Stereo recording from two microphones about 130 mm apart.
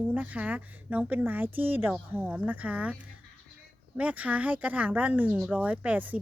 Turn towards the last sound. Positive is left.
turn(degrees=-10)  # may be behind; listen again after turning